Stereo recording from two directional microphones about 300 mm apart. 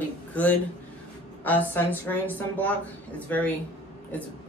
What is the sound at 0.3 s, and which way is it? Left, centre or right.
Speech, centre.